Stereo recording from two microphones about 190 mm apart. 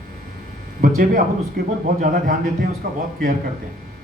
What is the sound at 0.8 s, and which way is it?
Speech, 45° right (ahead or behind).